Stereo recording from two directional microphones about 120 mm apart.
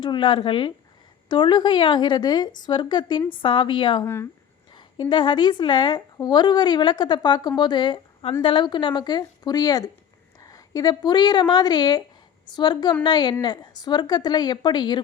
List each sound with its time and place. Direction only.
0.0 s speech: 40° left (ahead or behind)
4.0 s speech: 20° left (ahead or behind)
4.7 s a woman's voice: 40° left (ahead or behind)